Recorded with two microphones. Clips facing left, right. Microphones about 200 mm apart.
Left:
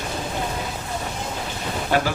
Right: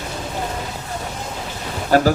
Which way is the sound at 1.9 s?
40° right (ahead or behind).